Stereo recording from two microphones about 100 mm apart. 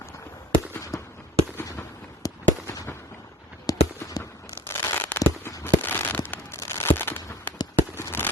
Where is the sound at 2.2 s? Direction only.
35° left (ahead or behind).